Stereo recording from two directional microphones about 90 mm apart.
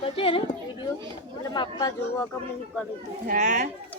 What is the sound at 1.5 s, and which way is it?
Chatter, 50° left (ahead or behind).